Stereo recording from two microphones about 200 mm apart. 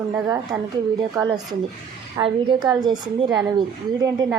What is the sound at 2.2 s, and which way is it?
Speech, 25° right (ahead or behind).